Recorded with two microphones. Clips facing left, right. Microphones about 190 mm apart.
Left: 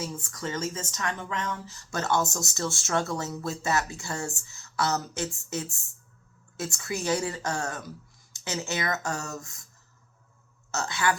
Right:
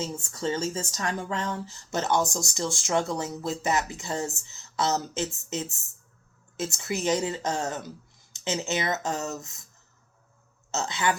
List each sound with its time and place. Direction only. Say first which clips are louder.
0.0 s speech: right 4 dB; 25° right (ahead or behind)
6.7 s speech: right 2 dB; 20° right (ahead or behind)
10.7 s speech: right 1 dB; 20° right (ahead or behind)